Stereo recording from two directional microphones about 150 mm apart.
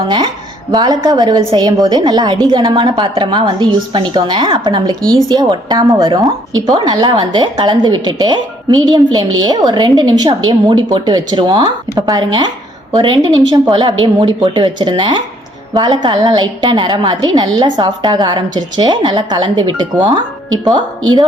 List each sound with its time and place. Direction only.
0.0 s a woman's voice: 30° right (ahead or behind)